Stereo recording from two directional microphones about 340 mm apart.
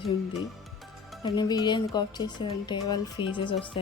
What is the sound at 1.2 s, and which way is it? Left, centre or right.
A woman's voice, centre.